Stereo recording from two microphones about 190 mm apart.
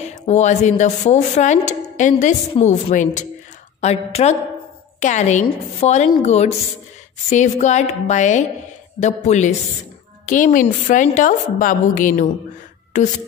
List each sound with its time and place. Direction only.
0.0 s a woman's voice: 35° left (ahead or behind)